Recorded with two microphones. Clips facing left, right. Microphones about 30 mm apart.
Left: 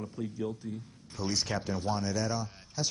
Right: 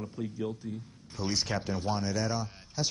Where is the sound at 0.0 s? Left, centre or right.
Centre.